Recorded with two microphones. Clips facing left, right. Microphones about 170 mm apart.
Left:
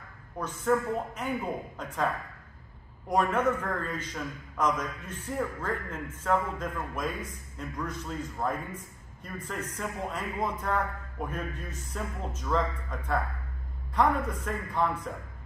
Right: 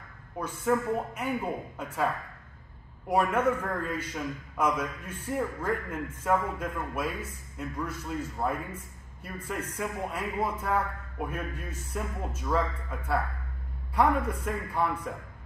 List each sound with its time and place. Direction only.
0.4 s a man's voice: 10° right (ahead or behind)
3.1 s a man's voice: 10° right (ahead or behind)